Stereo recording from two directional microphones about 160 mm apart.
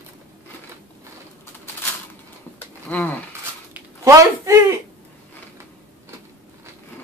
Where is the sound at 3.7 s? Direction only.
15° right (ahead or behind).